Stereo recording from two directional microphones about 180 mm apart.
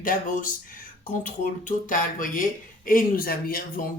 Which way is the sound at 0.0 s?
50° left (ahead or behind).